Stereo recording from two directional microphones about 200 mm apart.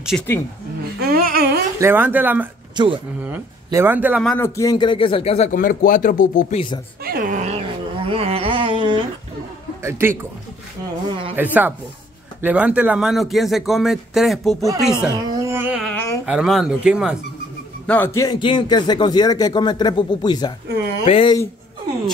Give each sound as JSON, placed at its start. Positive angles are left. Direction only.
{"t": 0.1, "sound": "speech", "side_deg": 5}
{"t": 1.1, "sound": "a sound", "side_deg": -45}
{"t": 1.8, "sound": "speech", "side_deg": -10}
{"t": 2.7, "sound": "speech", "side_deg": -25}
{"t": 3.2, "sound": "speech", "side_deg": -10}
{"t": 4.4, "sound": "speech", "side_deg": 15}
{"t": 5.5, "sound": "speech", "side_deg": 45}
{"t": 7.1, "sound": "a sound", "side_deg": -45}
{"t": 9.8, "sound": "speech", "side_deg": -10}
{"t": 11.3, "sound": "speech", "side_deg": -10}
{"t": 15.1, "sound": "a sound", "side_deg": -15}
{"t": 15.8, "sound": "a sound", "side_deg": 5}
{"t": 16.3, "sound": "speech", "side_deg": 0}
{"t": 17.8, "sound": "speech", "side_deg": 10}